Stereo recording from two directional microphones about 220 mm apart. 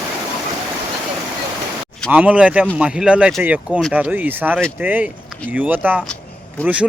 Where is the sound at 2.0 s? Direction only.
5° right (ahead or behind).